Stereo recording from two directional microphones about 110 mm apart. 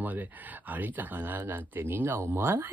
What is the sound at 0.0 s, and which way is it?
Speech, 15° right (ahead or behind).